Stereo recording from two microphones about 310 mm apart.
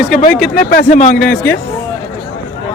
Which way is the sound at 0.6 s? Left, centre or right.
Left.